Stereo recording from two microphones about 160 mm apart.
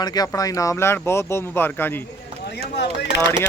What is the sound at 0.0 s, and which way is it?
Speech, 25° left (ahead or behind).